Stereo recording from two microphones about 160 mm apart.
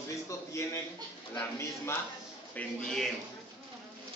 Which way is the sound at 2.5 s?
5° left (ahead or behind).